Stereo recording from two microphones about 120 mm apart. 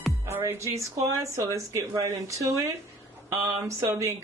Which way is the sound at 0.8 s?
25° right (ahead or behind).